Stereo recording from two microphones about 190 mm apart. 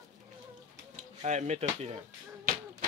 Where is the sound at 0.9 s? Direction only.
35° right (ahead or behind).